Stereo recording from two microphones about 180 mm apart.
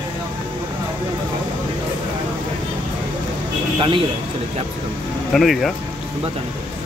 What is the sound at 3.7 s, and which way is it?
Speech, 25° right (ahead or behind).